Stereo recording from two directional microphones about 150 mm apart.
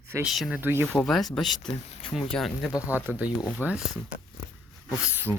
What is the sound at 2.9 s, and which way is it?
Speech, 10° right (ahead or behind).